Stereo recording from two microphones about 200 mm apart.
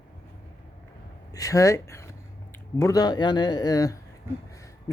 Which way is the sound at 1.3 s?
15° left (ahead or behind).